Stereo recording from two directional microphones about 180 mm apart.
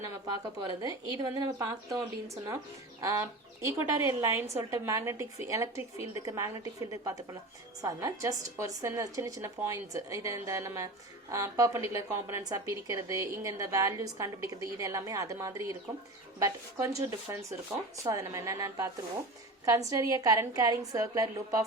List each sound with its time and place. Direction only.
0.0 s a woman's voice: 20° right (ahead or behind)
3.0 s a woman's voice: 15° right (ahead or behind)